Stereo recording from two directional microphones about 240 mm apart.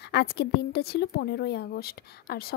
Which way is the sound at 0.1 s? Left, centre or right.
Left.